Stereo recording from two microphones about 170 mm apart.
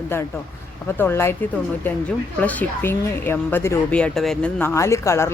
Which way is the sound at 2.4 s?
10° left (ahead or behind).